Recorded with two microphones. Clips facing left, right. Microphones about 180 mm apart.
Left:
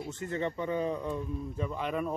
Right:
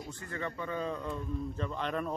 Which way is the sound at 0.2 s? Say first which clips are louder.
Left 6 dB; 20° left (ahead or behind).